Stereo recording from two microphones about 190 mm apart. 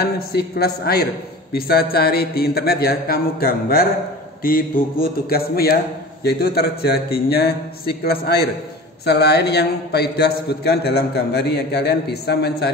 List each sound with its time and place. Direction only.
0.0 s a man's voice: 55° left (ahead or behind)